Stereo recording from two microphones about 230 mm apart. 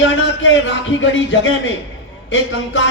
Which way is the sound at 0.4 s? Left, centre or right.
Left.